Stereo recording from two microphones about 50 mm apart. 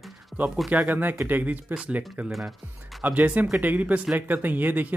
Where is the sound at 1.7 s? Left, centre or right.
Right.